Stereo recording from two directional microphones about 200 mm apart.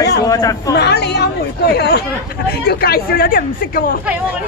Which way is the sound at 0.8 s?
55° left (ahead or behind).